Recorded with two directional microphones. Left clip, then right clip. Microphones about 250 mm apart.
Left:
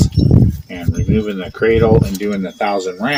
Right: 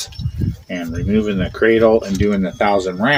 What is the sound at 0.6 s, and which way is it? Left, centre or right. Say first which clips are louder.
Speech: even; right.